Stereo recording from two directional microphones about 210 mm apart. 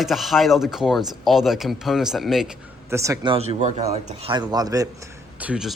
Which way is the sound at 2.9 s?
15° right (ahead or behind).